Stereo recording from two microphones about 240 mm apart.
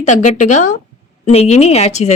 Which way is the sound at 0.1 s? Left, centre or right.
Left.